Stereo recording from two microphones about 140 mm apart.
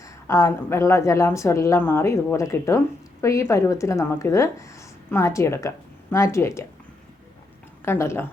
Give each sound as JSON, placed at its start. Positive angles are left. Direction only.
{"t": 0.0, "sound": "speech", "side_deg": 20}
{"t": 7.9, "sound": "speech", "side_deg": 20}